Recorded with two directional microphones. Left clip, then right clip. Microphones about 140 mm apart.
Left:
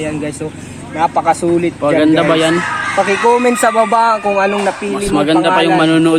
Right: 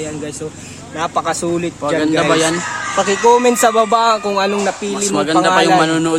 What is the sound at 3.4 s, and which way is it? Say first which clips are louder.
Speech: left 1 dB; 35° right (ahead or behind).